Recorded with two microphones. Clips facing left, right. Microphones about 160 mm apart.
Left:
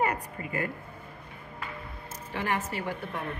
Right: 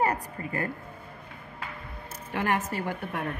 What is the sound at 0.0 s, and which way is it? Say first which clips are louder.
Speech: right 2 dB; 35° right (ahead or behind).